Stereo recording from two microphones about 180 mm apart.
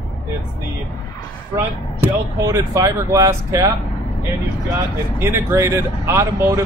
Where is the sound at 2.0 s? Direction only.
15° right (ahead or behind).